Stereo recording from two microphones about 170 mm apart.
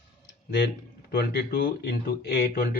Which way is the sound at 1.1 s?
65° left (ahead or behind).